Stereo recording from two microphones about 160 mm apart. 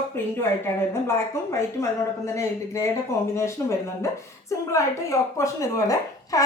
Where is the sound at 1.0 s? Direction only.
20° left (ahead or behind).